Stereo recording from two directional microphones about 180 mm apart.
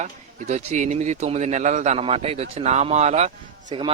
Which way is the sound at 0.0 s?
40° right (ahead or behind).